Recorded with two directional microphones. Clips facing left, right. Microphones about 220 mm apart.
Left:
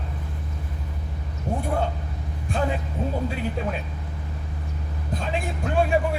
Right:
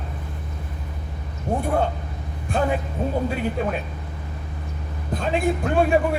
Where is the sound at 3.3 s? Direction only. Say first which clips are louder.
Right 4 dB; 55° right (ahead or behind).